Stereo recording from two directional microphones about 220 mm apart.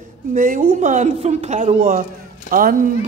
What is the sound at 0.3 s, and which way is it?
A woman's voice, 40° right (ahead or behind).